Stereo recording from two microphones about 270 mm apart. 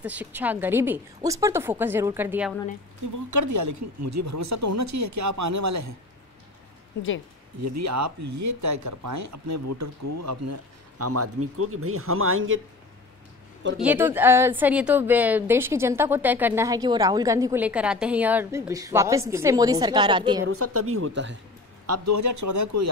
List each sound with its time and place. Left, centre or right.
0.0 s a woman's voice: centre
3.3 s speech: right
7.6 s speech: right
13.7 s a woman's voice: centre
20.4 s speech: right
21.8 s speech: right